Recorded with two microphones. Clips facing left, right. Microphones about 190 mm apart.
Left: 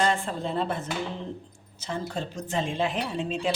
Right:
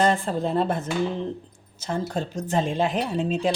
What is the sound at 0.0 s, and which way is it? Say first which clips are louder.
Speech: right 4 dB; 40° right (ahead or behind).